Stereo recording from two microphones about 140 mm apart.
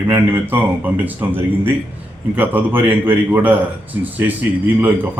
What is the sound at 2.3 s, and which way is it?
Speech, 10° right (ahead or behind).